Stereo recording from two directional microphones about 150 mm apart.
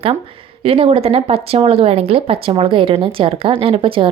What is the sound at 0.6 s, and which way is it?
Speech, 40° right (ahead or behind).